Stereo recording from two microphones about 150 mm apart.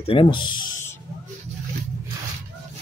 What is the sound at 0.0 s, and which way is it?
Speech, 35° left (ahead or behind).